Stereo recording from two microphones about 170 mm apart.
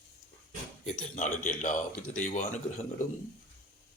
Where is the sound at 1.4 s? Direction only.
45° left (ahead or behind).